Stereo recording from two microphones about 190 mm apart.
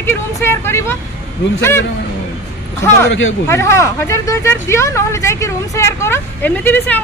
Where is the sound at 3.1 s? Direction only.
90° left.